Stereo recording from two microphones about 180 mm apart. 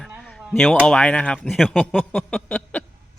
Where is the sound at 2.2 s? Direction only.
10° left (ahead or behind).